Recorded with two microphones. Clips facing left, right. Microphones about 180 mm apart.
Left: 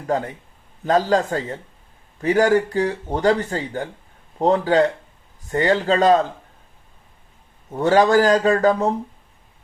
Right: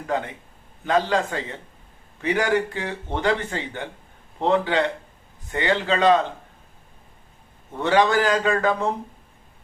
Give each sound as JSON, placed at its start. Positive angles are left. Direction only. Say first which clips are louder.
{"t": 0.9, "sound": "speech", "louder": "left 4 dB", "side_deg": 40}
{"t": 7.8, "sound": "speech", "louder": "left 4 dB", "side_deg": 40}